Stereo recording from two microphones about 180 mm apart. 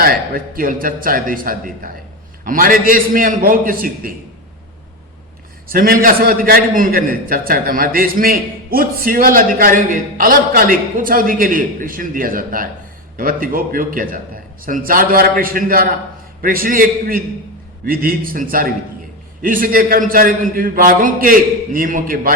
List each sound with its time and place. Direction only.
0.0 s a man's voice: 55° right (ahead or behind)
5.6 s a man's voice: 55° right (ahead or behind)